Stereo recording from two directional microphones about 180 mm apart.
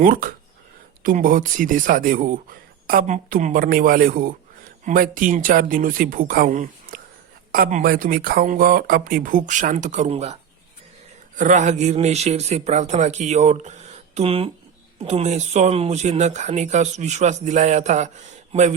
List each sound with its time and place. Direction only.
0.0 s speech: 50° right (ahead or behind)
11.3 s speech: 45° right (ahead or behind)